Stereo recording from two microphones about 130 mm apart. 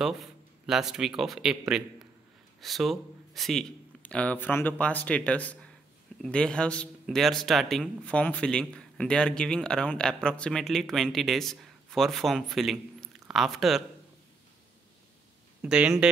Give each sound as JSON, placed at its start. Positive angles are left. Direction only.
{"t": 0.0, "sound": "speech", "side_deg": -5}
{"t": 15.6, "sound": "speech", "side_deg": -10}